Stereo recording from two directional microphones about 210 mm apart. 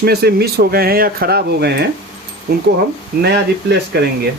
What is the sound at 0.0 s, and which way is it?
Speech, 50° right (ahead or behind).